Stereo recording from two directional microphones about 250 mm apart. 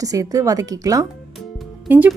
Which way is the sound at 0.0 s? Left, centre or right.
Centre.